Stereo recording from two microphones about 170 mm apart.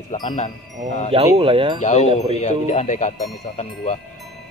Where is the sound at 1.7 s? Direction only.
40° left (ahead or behind).